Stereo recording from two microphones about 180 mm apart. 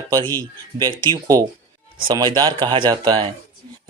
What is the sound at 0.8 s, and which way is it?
Speech, 25° right (ahead or behind).